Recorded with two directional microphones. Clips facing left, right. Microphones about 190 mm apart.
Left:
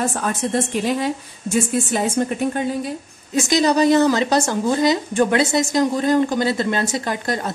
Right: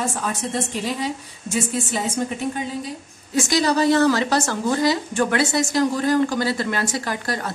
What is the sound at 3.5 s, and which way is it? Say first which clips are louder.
A woman's voice: left 3 dB; 20° left (ahead or behind).